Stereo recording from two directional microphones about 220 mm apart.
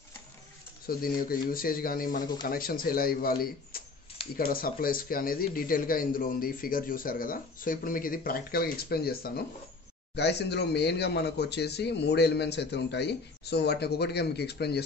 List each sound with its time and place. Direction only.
0.8 s speech: 40° left (ahead or behind)